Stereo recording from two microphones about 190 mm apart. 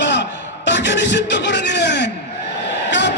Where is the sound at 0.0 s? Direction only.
70° left (ahead or behind).